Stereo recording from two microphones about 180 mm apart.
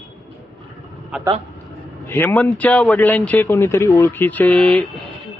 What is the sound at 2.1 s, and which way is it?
Speech, 10° left (ahead or behind).